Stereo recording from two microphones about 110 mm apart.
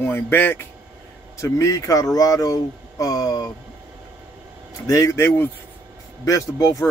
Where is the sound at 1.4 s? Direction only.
30° left (ahead or behind).